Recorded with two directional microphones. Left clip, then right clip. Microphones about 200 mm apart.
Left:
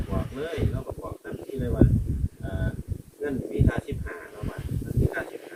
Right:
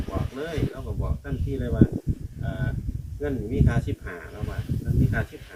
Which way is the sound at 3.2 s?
25° right (ahead or behind).